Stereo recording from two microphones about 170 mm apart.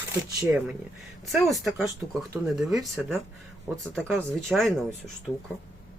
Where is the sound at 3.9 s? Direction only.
10° right (ahead or behind).